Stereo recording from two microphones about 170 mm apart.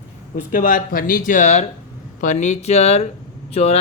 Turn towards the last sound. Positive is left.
turn(degrees=40)  # may be behind; listen again after turning